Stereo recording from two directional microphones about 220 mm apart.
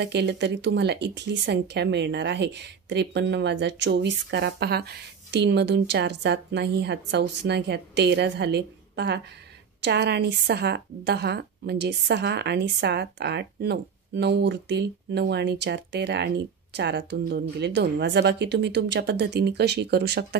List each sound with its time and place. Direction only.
0.0 s speech: 50° right (ahead or behind)